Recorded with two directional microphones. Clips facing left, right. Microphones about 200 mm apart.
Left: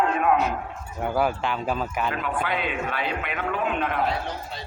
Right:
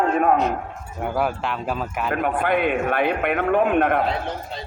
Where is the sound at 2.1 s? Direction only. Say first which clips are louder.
Right 6 dB; 55° right (ahead or behind).